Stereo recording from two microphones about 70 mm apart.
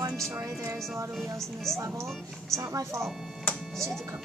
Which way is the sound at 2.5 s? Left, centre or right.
Right.